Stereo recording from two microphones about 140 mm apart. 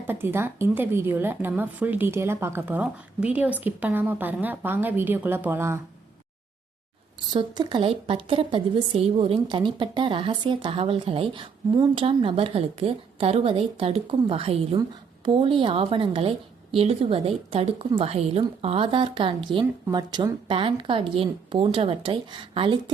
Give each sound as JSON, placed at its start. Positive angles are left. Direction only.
{"t": 0.1, "sound": "speech", "side_deg": -15}
{"t": 7.3, "sound": "a woman's voice", "side_deg": -30}